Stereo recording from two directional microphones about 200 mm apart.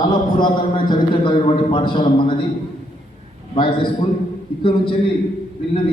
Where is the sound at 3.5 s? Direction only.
25° left (ahead or behind).